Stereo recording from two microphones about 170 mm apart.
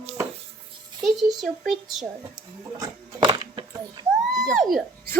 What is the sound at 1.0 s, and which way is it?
Speech, centre (ahead or behind).